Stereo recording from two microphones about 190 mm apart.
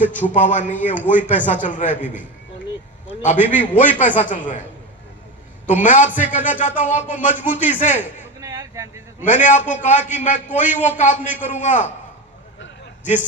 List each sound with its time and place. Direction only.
0.2 s a man's voice: 40° left (ahead or behind)
3.2 s a man's voice: 40° left (ahead or behind)
5.8 s a man's voice: 45° left (ahead or behind)
8.4 s a sound: 15° right (ahead or behind)
9.2 s a man's voice: 40° left (ahead or behind)